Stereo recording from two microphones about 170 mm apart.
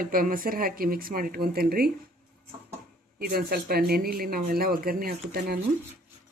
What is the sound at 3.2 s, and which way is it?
Speech, 65° right (ahead or behind).